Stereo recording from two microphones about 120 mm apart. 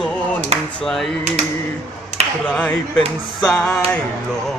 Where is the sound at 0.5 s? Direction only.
60° right (ahead or behind).